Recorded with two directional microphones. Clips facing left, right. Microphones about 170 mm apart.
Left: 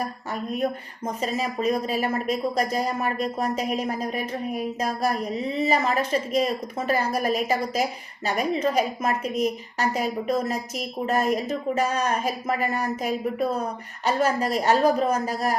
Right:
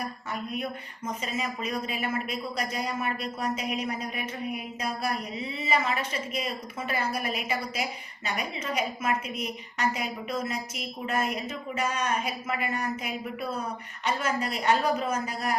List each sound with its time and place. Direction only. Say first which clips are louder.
0.5 s speech: left 7 dB; 40° left (ahead or behind)